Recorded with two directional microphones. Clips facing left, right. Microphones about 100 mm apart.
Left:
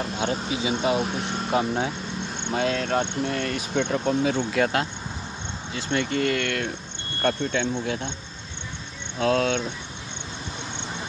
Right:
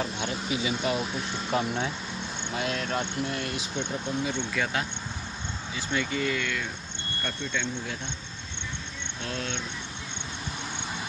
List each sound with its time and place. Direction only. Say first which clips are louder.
0.2 s speech: left 4 dB; 30° left (ahead or behind)
1.0 s speech: left 4 dB; 60° left (ahead or behind)
1.3 s speech: left 4 dB; 35° left (ahead or behind)
2.8 s speech: left 5 dB; 65° left (ahead or behind); by 4.4 s 80° left
5.9 s speech: left 5 dB; 60° left (ahead or behind)
9.2 s speech: left 14 dB; 90° left